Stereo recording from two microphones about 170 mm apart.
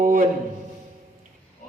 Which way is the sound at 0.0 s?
55° right (ahead or behind).